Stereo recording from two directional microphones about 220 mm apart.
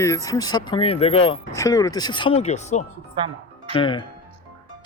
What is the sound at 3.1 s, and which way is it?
Music, 25° right (ahead or behind).